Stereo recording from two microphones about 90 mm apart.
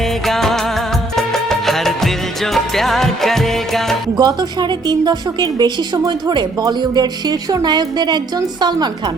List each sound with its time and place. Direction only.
0.3 s music of bollywood: 5° left (ahead or behind)
1.1 s music: 5° left (ahead or behind)
4.2 s speech: 50° right (ahead or behind)